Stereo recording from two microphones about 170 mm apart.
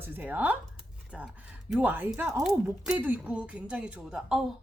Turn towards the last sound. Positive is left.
turn(degrees=-5)  # may be behind; listen again after turning